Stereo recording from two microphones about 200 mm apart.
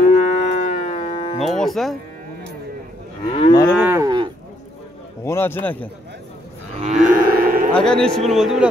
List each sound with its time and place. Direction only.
0.0 s moo: 40° left (ahead or behind)
1.4 s moo: centre (ahead or behind)
3.3 s moo: 25° left (ahead or behind)
3.7 s cattle: 10° right (ahead or behind)
5.2 s a man's voice: 10° left (ahead or behind)
6.8 s cattle: 40° right (ahead or behind)
7.8 s a man's voice: 5° left (ahead or behind)